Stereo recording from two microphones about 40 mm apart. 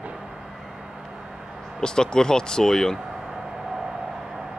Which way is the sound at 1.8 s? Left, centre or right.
Centre.